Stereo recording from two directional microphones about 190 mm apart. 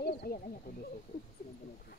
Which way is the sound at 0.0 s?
55° left (ahead or behind).